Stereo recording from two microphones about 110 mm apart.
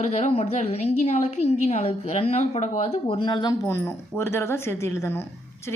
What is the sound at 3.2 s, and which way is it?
Speech, 45° left (ahead or behind).